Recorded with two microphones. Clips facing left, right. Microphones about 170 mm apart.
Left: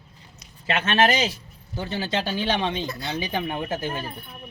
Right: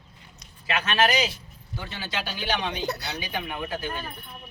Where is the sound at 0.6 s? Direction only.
25° left (ahead or behind).